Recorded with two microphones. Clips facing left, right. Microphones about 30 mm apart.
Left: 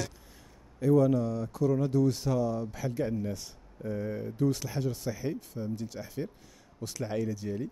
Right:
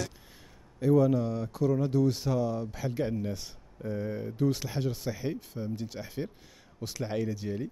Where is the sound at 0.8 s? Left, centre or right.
Centre.